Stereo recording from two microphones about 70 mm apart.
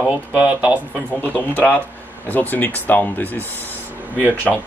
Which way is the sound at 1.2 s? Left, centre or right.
Left.